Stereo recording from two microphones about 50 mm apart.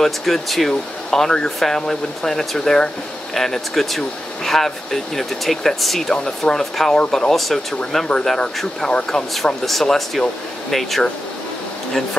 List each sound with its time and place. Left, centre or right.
0.0 s speech: centre